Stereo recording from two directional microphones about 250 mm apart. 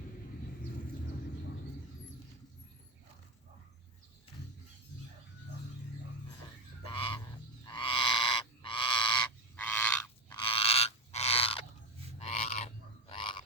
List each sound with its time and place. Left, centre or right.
6.8 s bird: left
7.6 s frog: centre
9.6 s frog: centre
10.3 s a sound: left
12.2 s frog: left